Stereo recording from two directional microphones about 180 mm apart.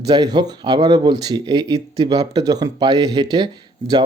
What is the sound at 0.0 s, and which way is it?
Speech, 25° right (ahead or behind).